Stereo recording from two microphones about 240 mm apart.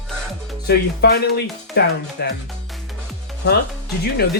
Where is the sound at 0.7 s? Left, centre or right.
Left.